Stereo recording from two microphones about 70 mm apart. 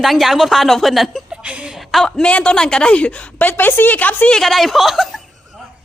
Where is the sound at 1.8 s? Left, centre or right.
Centre.